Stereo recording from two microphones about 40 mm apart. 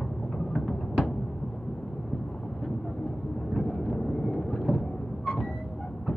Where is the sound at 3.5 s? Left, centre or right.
Centre.